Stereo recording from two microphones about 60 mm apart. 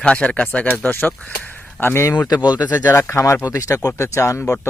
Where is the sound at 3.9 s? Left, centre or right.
Left.